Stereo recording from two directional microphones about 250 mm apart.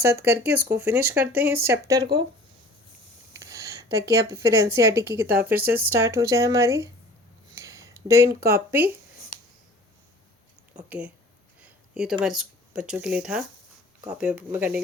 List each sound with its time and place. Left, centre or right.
0.0 s speech: centre
0.4 s speech: right
0.8 s speech: centre
3.3 s speech: centre
7.5 s a sound: centre
8.4 s speech: centre
10.8 s speech: centre
11.6 s a sound: centre
12.2 s speech: centre